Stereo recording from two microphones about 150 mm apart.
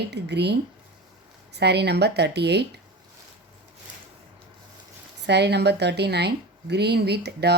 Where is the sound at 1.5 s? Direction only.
90° right.